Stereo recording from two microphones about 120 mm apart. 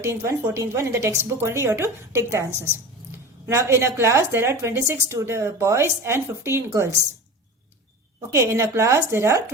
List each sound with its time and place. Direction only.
0.0 s a woman's voice: 25° right (ahead or behind)
8.3 s a woman's voice: 20° right (ahead or behind)